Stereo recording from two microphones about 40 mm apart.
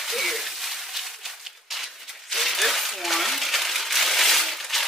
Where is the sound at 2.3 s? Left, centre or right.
Centre.